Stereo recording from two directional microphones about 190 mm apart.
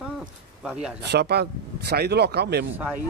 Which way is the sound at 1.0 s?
60° right (ahead or behind).